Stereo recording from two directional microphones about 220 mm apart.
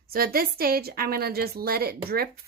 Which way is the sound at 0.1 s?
40° right (ahead or behind).